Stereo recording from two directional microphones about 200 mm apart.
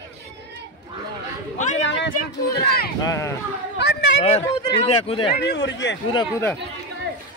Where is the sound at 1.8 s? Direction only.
65° left (ahead or behind).